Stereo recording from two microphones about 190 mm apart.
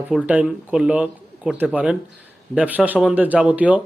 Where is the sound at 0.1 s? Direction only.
5° right (ahead or behind).